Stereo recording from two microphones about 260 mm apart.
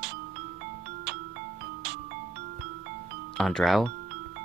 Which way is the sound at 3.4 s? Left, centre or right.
Centre.